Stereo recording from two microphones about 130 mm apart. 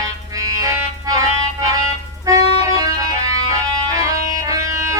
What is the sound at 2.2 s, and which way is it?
Music, 25° right (ahead or behind).